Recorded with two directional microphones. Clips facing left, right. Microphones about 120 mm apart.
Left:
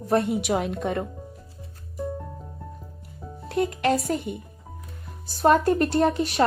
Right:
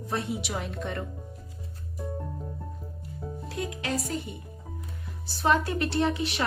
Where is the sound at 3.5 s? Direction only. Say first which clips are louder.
Left 10 dB; 60° left (ahead or behind).